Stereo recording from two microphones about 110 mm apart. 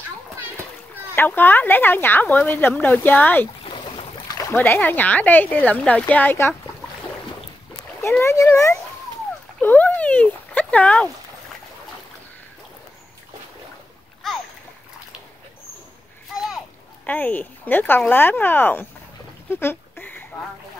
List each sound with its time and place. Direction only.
1.1 s speech: 20° left (ahead or behind)
3.7 s boat: 45° left (ahead or behind)
4.5 s speech: 20° left (ahead or behind)
8.2 s speech: 25° left (ahead or behind)
9.6 s a sound: 15° left (ahead or behind)
14.2 s splash: centre (ahead or behind)
17.0 s speech: 15° left (ahead or behind)
19.5 s a sound: 20° left (ahead or behind)